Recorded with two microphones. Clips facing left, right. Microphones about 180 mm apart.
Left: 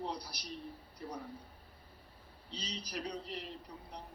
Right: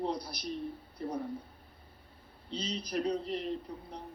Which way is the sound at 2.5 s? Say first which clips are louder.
Right 8 dB; 55° right (ahead or behind).